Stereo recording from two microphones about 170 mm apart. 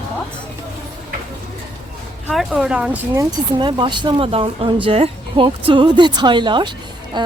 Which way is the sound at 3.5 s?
30° right (ahead or behind).